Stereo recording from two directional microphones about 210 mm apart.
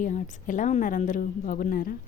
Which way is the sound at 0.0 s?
35° left (ahead or behind).